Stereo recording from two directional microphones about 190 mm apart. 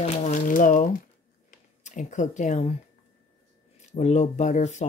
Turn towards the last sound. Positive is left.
turn(degrees=40)  # may be behind; listen again after turning